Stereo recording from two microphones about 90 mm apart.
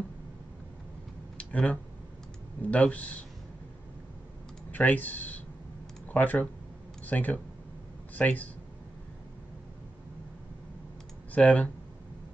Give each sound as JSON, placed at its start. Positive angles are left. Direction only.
{"t": 1.4, "sound": "speech", "side_deg": 15}
{"t": 4.6, "sound": "speech", "side_deg": 20}
{"t": 11.3, "sound": "speech", "side_deg": 15}